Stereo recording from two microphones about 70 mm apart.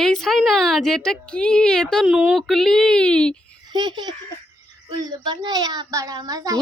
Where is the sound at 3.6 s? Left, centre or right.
Right.